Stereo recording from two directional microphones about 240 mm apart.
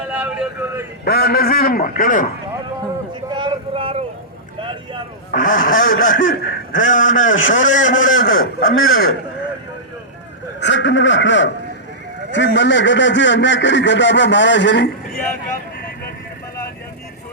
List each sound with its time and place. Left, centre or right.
0.1 s speech: centre
1.0 s speech: left
3.2 s a man's voice: centre
5.3 s speech: left
10.6 s speech: left